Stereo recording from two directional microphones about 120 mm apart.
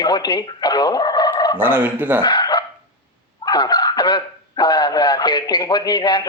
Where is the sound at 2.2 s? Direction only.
40° left (ahead or behind).